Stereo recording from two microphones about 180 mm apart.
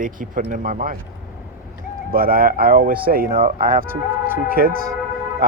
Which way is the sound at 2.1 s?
55° right (ahead or behind).